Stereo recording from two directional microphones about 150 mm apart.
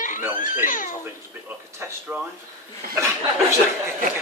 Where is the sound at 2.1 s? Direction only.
10° right (ahead or behind).